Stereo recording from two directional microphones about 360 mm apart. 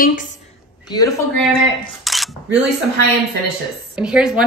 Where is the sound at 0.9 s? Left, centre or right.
Centre.